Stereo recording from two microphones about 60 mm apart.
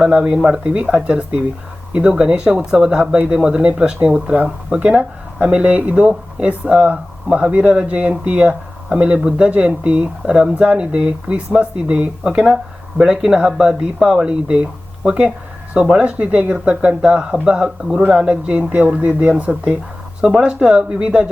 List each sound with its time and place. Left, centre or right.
0.0 s speech: centre